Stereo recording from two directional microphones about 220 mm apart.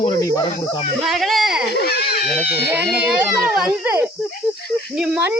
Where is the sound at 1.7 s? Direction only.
45° left (ahead or behind).